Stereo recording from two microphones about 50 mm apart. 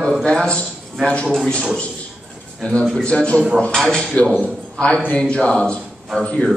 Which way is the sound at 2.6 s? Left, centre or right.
Left.